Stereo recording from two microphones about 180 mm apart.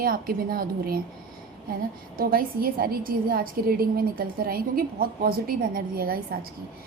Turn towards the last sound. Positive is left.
turn(degrees=-55)  # may be behind; listen again after turning